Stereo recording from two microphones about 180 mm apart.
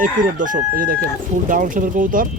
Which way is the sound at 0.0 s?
45° right (ahead or behind).